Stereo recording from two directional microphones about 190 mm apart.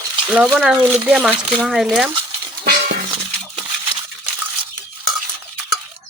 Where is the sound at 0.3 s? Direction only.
5° right (ahead or behind).